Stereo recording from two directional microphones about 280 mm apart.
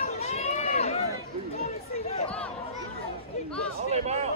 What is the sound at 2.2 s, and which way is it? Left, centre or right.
Chatter, centre.